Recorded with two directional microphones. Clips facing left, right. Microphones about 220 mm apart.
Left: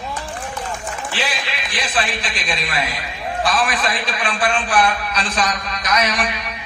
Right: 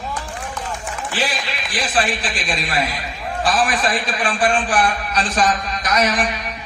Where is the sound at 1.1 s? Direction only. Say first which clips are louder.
Right 3 dB; 45° right (ahead or behind).